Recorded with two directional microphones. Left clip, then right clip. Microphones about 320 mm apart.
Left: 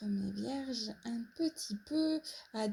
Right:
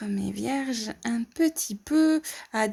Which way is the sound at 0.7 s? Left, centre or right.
Right.